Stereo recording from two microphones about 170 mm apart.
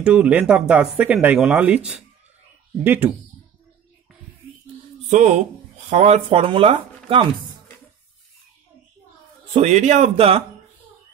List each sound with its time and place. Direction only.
0.0 s speech: 5° right (ahead or behind)
5.1 s speech: 45° right (ahead or behind)
9.5 s speech: 40° right (ahead or behind)